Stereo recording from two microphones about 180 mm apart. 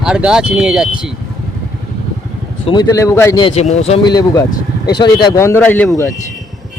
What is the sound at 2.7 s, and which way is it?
Speech, 20° left (ahead or behind).